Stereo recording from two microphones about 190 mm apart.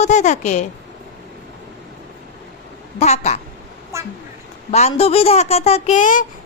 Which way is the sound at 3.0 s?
35° left (ahead or behind).